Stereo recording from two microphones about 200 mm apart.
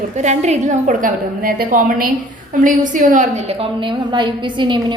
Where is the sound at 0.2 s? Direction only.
35° right (ahead or behind).